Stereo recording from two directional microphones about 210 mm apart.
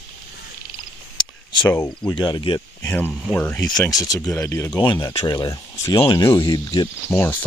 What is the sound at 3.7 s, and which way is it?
Speech, 15° left (ahead or behind).